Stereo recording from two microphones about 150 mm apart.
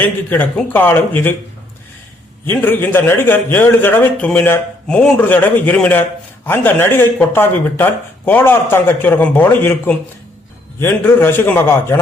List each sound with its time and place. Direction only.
0.0 s a man's voice: 10° left (ahead or behind)
2.5 s a man's voice: 15° left (ahead or behind)